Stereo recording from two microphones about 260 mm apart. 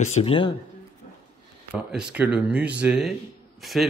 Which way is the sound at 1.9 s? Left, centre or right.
Centre.